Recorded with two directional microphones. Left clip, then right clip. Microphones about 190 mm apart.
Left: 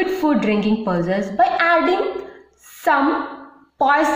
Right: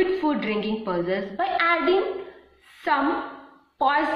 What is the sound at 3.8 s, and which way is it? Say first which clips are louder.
Speech: left 6 dB; 55° left (ahead or behind).